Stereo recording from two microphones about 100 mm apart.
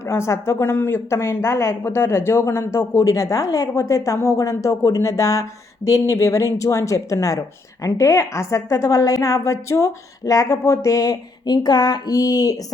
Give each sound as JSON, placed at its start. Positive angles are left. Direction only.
{"t": 0.0, "sound": "speech", "side_deg": 25}